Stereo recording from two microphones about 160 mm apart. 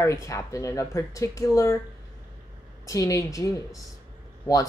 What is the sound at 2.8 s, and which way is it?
Speech, 20° left (ahead or behind).